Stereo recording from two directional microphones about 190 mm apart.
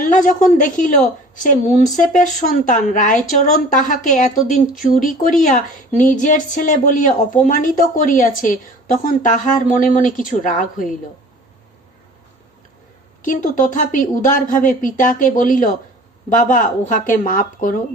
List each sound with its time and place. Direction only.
0.0 s a woman's voice: 45° left (ahead or behind)
13.2 s speech: 45° left (ahead or behind)